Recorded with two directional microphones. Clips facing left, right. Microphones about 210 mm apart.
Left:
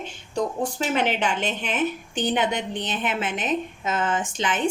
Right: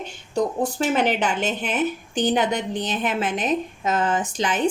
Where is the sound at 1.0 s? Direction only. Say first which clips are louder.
Right 2 dB; 40° right (ahead or behind).